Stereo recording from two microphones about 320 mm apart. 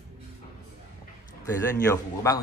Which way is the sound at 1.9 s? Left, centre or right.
Centre.